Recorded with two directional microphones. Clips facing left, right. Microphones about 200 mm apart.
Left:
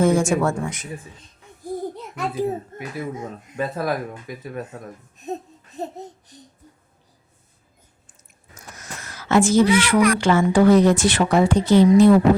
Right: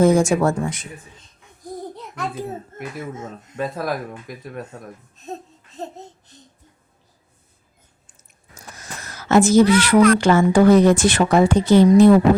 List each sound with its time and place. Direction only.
0.0 s a woman's voice: 40° right (ahead or behind)
2.1 s speech: 10° left (ahead or behind)
3.6 s speech: centre (ahead or behind)
5.1 s a sound: 15° left (ahead or behind)
8.5 s a sound: 35° right (ahead or behind)
9.7 s a woman's voice: 40° right (ahead or behind)